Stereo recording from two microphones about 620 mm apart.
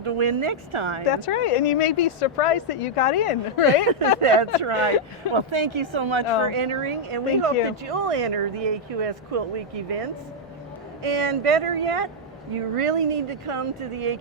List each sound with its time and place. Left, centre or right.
0.0 s speech: right
1.0 s speech: left
1.9 s speech: left
2.2 s speech: left
2.9 s speech: left
4.2 s speech: right